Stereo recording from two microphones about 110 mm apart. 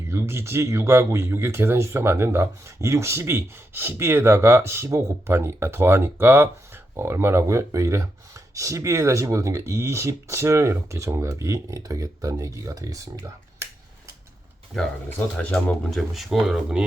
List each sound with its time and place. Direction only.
0.1 s speech: 25° right (ahead or behind)
14.7 s speech: centre (ahead or behind)
15.4 s speech: 15° left (ahead or behind); by 16.8 s 10° right (ahead or behind)